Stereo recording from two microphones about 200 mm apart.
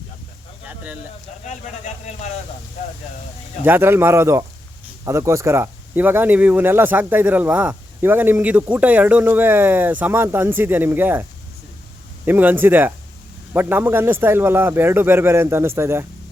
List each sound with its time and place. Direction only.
1.5 s speech: 35° left (ahead or behind)
3.6 s speech: 10° right (ahead or behind)